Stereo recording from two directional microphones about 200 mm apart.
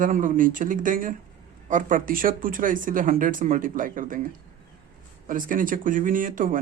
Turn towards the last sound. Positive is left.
turn(degrees=-40)  # may be behind; listen again after turning